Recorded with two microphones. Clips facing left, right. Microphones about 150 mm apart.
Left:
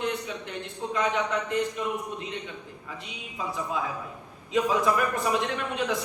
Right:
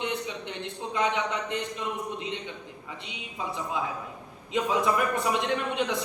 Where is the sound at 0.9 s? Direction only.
20° right (ahead or behind).